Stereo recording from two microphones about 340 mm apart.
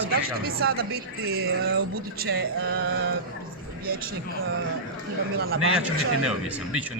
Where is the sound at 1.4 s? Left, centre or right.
Right.